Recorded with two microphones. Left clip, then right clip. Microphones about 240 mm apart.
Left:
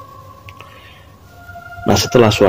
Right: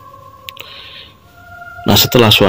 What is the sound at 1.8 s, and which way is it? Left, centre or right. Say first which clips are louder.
Speech: right 2 dB; right.